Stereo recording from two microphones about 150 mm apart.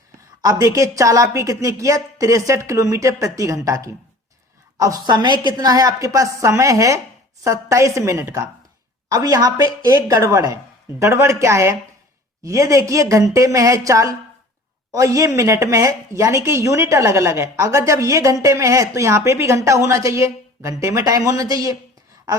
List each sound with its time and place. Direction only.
0.4 s a woman's voice: 20° right (ahead or behind)